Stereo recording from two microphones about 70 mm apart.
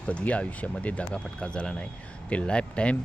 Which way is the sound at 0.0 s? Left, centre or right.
Centre.